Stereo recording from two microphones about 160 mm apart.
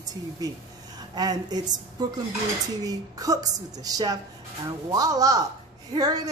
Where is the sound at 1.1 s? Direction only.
25° right (ahead or behind).